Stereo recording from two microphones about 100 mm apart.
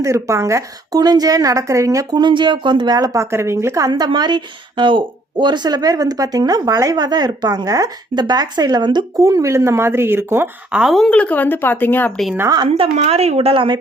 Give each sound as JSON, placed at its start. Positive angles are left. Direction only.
{"t": 0.0, "sound": "a woman's voice", "side_deg": -30}
{"t": 9.2, "sound": "speech", "side_deg": -30}
{"t": 10.7, "sound": "speech", "side_deg": -5}
{"t": 11.1, "sound": "speech", "side_deg": 15}
{"t": 12.6, "sound": "a woman's voice", "side_deg": -75}